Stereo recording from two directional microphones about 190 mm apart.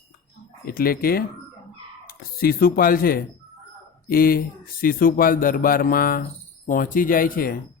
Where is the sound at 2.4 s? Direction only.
50° left (ahead or behind).